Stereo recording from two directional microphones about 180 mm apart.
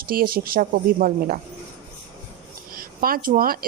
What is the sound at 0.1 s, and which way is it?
Speech, 55° right (ahead or behind).